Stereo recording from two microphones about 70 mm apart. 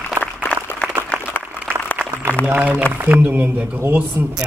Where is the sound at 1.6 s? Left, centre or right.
Left.